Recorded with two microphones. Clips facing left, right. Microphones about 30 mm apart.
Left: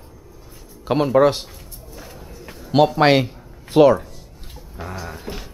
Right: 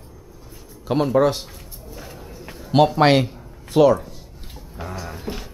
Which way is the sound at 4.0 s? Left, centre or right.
Centre.